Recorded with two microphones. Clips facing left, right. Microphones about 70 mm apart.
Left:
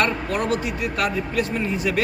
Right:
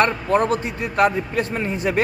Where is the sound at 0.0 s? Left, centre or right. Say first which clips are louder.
Right 4 dB; right.